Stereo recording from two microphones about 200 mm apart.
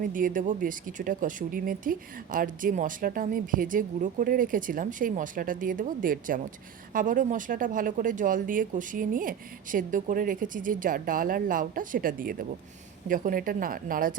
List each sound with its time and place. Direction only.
0.0 s speech: 45° right (ahead or behind)